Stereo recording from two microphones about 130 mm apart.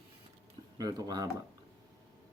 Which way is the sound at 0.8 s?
30° right (ahead or behind).